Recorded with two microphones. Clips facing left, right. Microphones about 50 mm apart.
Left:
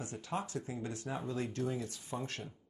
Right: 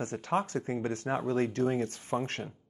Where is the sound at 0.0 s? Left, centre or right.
Right.